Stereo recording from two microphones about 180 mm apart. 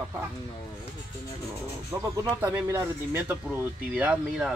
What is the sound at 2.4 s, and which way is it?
Speech, 10° right (ahead or behind).